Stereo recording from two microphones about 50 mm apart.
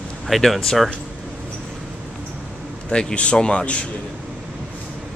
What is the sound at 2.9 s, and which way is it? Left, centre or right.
A man's voice, centre.